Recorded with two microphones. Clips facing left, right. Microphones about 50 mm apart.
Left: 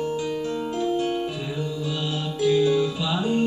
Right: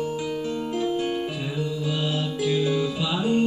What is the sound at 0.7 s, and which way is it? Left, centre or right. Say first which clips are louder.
Music: left 1 dB; right.